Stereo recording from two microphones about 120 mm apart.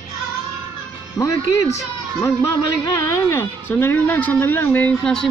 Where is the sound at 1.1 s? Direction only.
25° left (ahead or behind).